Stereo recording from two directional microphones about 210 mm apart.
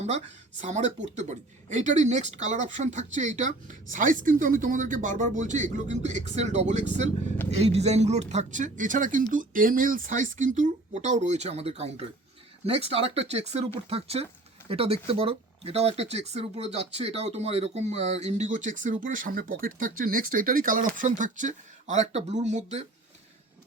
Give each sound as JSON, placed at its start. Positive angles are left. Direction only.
{"t": 0.6, "sound": "speech", "side_deg": -35}